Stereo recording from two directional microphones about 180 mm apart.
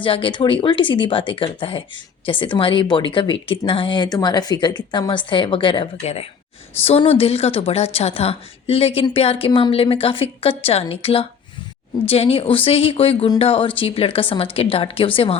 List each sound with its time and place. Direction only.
0.0 s a woman's voice: 30° left (ahead or behind)